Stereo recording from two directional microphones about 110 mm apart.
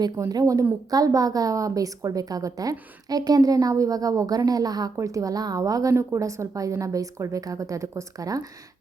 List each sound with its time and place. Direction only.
0.2 s a woman's voice: 30° right (ahead or behind)